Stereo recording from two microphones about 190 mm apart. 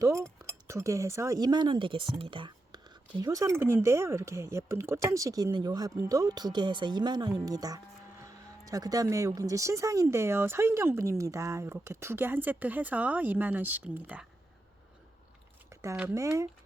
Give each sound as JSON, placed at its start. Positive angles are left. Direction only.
{"t": 0.0, "sound": "speech", "side_deg": -15}
{"t": 15.7, "sound": "speech", "side_deg": -15}